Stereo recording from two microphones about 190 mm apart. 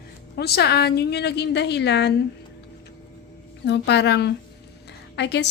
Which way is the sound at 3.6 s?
65° left (ahead or behind).